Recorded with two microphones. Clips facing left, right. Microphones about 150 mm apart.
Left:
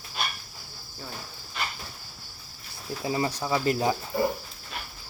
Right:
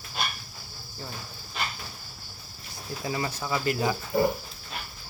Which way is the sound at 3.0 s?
30° left (ahead or behind).